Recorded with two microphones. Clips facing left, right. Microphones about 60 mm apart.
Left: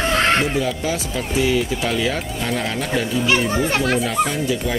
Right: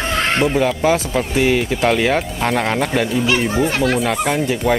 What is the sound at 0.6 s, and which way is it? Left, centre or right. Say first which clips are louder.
Speech: right 6 dB; right.